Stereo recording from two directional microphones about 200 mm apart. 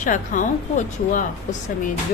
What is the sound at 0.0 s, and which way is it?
A woman's voice, 40° left (ahead or behind).